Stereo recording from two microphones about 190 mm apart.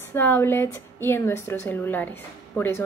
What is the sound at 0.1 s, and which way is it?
A woman's voice, 10° left (ahead or behind).